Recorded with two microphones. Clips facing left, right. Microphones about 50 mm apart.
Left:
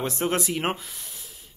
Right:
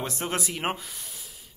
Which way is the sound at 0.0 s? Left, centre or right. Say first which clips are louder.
Left 5 dB; centre.